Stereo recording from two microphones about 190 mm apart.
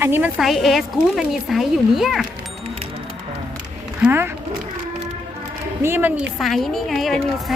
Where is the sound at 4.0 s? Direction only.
10° right (ahead or behind).